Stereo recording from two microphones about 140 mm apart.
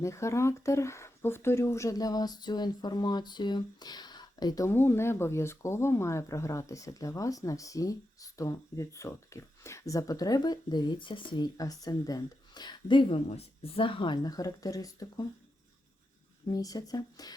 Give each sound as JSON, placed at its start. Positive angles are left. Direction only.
{"t": 0.0, "sound": "speech", "side_deg": 20}
{"t": 16.5, "sound": "speech", "side_deg": 25}